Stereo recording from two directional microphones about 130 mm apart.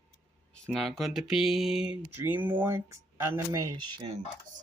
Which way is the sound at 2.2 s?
15° right (ahead or behind).